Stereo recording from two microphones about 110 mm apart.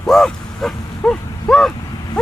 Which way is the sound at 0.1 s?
5° left (ahead or behind).